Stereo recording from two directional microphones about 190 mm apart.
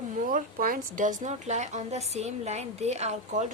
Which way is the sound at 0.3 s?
45° right (ahead or behind).